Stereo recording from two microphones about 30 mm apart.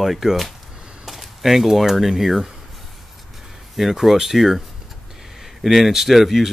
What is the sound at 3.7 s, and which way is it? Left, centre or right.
Speech, centre.